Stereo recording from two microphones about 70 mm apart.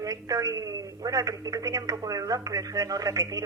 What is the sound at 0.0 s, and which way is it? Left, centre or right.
Speech, right.